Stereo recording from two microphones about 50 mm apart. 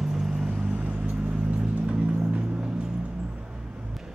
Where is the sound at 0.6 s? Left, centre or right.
Right.